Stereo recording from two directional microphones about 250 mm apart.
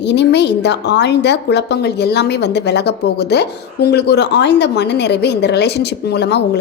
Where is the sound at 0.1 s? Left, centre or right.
Left.